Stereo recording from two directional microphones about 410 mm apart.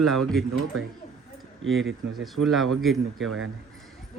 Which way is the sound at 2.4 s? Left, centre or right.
Right.